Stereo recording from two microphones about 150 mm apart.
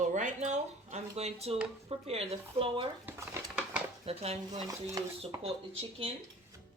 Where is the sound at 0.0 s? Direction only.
55° right (ahead or behind); by 2.8 s 40° right (ahead or behind).